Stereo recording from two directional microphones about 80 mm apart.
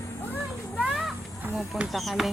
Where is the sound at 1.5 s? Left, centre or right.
Centre.